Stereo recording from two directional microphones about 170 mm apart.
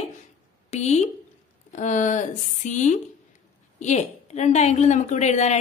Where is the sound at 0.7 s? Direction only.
40° left (ahead or behind).